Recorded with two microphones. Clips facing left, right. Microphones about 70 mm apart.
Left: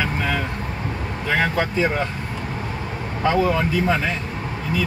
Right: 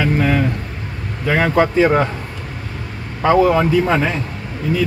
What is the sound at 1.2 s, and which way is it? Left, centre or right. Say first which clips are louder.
Speech: right 6 dB; right.